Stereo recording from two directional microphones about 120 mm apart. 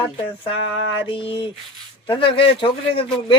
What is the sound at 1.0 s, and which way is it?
Speech, 45° left (ahead or behind).